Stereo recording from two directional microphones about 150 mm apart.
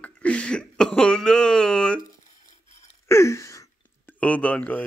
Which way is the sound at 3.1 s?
20° left (ahead or behind).